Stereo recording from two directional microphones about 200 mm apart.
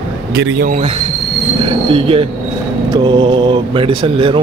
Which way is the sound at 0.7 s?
35° right (ahead or behind).